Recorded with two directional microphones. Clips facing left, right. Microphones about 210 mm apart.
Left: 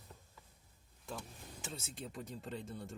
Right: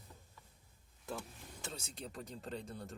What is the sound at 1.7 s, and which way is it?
Speech, 5° left (ahead or behind).